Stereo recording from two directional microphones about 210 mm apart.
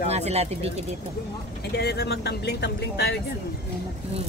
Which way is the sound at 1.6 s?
50° left (ahead or behind).